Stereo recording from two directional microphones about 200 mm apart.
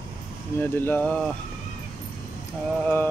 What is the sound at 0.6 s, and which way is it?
Speech, 10° left (ahead or behind).